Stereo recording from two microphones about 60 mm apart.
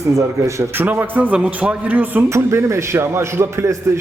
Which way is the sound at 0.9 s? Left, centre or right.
Right.